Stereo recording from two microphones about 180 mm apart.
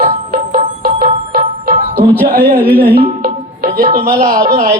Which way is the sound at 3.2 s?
55° right (ahead or behind).